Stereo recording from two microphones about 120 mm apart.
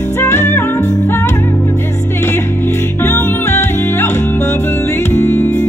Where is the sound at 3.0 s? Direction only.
20° left (ahead or behind).